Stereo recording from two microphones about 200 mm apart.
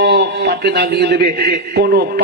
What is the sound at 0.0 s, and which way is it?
A man's voice, 60° right (ahead or behind).